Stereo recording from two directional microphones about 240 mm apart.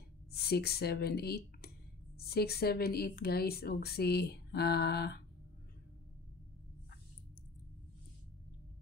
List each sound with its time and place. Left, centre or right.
0.3 s speech: left